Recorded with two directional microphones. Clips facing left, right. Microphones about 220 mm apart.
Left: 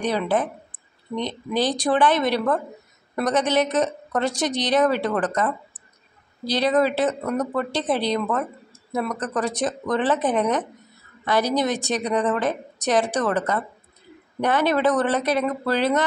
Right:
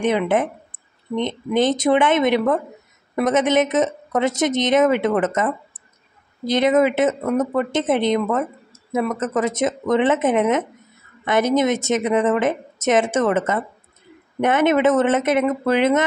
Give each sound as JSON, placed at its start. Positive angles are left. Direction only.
{"t": 0.0, "sound": "a woman's voice", "side_deg": -20}